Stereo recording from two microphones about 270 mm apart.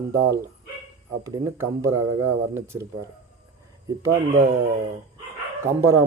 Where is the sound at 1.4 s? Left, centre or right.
Centre.